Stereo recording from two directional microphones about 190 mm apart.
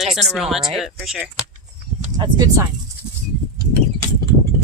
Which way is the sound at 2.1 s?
20° right (ahead or behind).